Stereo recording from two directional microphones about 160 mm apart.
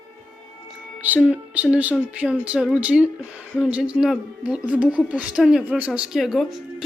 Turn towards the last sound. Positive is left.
turn(degrees=0)  # may be behind; listen again after turning